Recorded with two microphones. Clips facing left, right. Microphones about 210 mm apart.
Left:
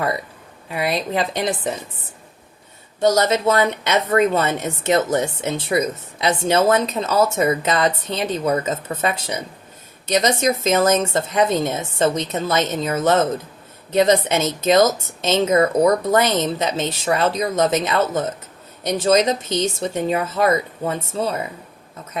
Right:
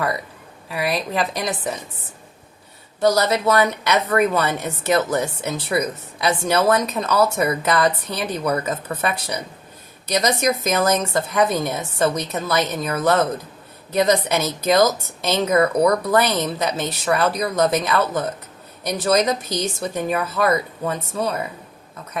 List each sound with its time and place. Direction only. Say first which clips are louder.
0.7 s a woman's voice: left 1 dB; 25° left (ahead or behind)
3.0 s a woman's voice: left 1 dB; 25° left (ahead or behind)